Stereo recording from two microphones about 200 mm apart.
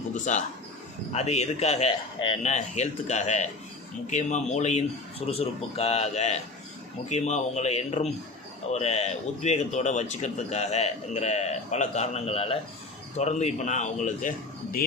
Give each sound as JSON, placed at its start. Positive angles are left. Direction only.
{"t": 0.1, "sound": "a man's voice", "side_deg": 35}